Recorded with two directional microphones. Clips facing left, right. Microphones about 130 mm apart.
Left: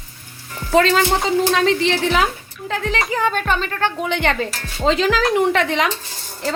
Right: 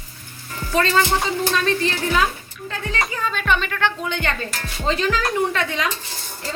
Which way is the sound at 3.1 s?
75° left (ahead or behind).